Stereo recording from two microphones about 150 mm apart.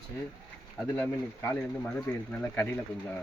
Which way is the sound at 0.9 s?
20° left (ahead or behind).